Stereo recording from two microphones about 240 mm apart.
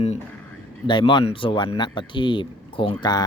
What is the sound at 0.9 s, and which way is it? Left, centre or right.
Speech, centre.